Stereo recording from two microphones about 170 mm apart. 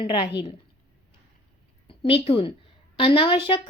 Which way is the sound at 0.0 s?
30° left (ahead or behind).